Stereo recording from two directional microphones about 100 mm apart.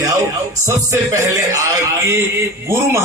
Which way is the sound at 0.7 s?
30° right (ahead or behind).